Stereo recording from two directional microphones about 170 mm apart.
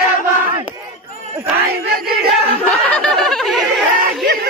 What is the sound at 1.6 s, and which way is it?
Speech, 65° right (ahead or behind).